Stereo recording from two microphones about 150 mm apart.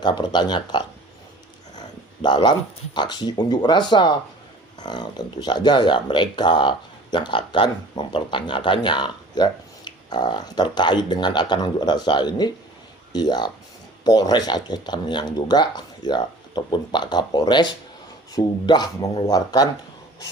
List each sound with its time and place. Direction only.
0.0 s speech: 30° left (ahead or behind)
2.2 s speech: 30° left (ahead or behind)